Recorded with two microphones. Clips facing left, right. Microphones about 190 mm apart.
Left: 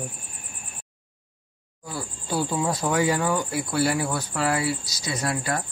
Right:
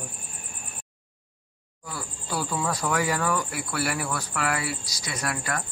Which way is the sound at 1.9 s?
25° left (ahead or behind).